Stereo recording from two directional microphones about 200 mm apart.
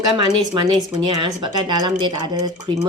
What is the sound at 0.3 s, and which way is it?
Speech, 20° right (ahead or behind).